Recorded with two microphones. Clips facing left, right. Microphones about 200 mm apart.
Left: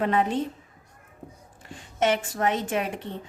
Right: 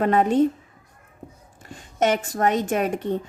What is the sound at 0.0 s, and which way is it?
Speech, 45° right (ahead or behind).